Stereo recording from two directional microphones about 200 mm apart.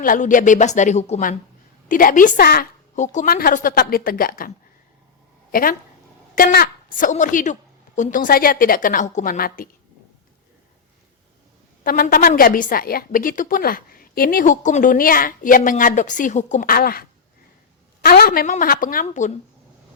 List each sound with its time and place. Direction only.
0.0 s a woman's voice: 40° left (ahead or behind)
11.8 s a woman's voice: 45° left (ahead or behind)